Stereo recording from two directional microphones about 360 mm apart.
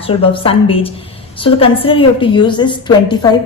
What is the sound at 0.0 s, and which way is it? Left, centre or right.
A woman's voice, centre.